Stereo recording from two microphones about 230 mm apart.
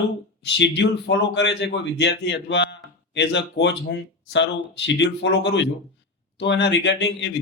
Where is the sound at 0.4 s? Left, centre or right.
Left.